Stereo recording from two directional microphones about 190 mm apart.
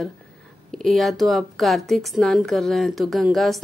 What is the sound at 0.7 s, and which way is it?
A woman's voice, centre (ahead or behind).